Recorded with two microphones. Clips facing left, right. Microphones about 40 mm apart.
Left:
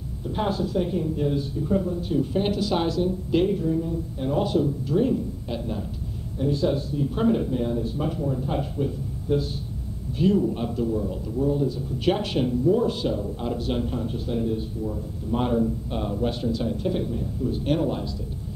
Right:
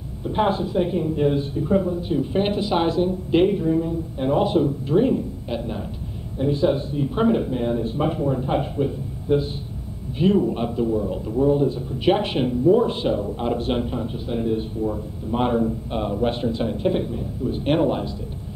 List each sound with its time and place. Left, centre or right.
0.2 s a woman's voice: right
11.3 s a man's voice: right
13.8 s a woman's voice: centre
14.4 s a man's voice: right
17.6 s a woman's voice: right